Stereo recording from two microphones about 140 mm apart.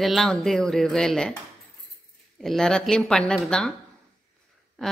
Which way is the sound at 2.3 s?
Centre (ahead or behind).